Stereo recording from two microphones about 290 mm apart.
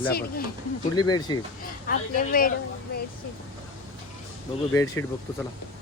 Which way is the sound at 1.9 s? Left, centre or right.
Left.